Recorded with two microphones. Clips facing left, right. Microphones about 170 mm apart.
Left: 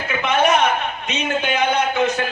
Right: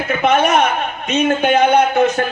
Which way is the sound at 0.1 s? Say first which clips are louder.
Right 3 dB; 50° right (ahead or behind).